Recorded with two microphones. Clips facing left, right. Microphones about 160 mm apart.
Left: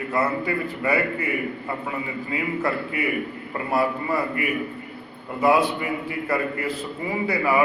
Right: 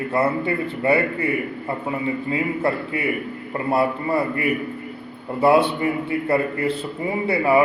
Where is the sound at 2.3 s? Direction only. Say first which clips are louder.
Right 1 dB; 30° right (ahead or behind).